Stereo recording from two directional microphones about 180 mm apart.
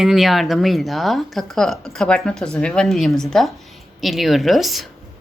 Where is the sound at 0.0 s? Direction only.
Centre (ahead or behind).